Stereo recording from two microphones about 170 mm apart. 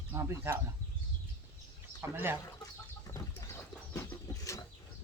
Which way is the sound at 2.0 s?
15° right (ahead or behind).